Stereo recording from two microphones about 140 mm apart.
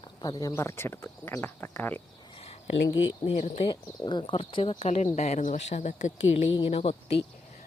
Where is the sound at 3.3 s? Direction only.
50° left (ahead or behind).